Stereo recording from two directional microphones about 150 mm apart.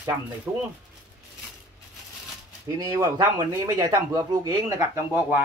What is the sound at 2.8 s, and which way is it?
Speech, 20° right (ahead or behind).